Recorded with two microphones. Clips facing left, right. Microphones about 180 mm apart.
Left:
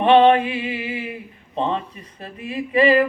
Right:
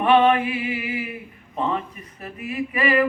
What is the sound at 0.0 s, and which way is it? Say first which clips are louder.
Speech: left 3 dB; 25° left (ahead or behind).